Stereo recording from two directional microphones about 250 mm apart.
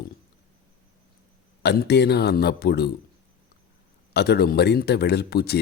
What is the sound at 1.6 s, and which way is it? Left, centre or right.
A man's voice, left.